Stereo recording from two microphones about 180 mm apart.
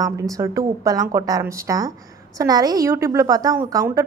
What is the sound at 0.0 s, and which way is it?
A woman's voice, 20° right (ahead or behind).